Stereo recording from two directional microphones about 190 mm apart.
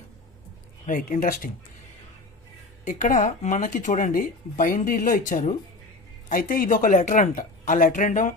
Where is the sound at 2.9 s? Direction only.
45° left (ahead or behind).